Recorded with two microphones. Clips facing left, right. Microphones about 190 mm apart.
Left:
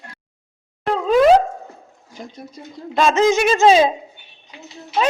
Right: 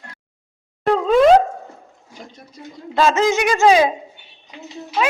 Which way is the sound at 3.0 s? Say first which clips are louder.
Left 1 dB; 20° left (ahead or behind).